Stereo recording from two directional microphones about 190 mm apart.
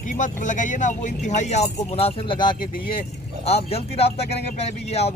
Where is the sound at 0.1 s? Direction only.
40° left (ahead or behind).